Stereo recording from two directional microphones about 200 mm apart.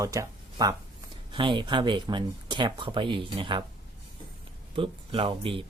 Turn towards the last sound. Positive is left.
turn(degrees=-25)  # may be behind; listen again after turning